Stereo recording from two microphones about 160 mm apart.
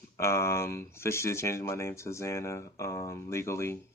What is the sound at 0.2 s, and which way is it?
Speech, 15° left (ahead or behind).